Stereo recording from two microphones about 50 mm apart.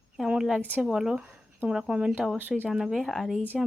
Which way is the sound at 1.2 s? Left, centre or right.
Right.